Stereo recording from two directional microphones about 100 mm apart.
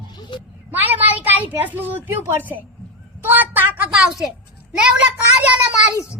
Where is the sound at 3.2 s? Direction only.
20° right (ahead or behind).